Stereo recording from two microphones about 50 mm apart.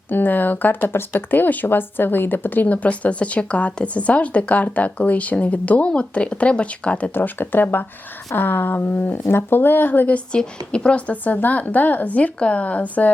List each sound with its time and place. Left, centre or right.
0.1 s speech: left
7.1 s speech: left
10.3 s speech: centre